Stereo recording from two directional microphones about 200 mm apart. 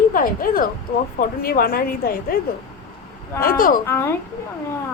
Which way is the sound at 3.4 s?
45° left (ahead or behind).